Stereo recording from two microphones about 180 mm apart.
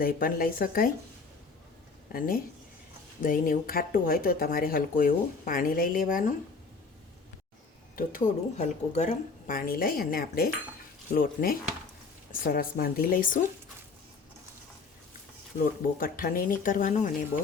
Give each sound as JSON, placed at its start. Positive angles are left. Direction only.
{"t": 0.0, "sound": "speech", "side_deg": 50}
{"t": 2.1, "sound": "speech", "side_deg": 55}
{"t": 7.9, "sound": "speech", "side_deg": 45}
{"t": 15.6, "sound": "speech", "side_deg": 55}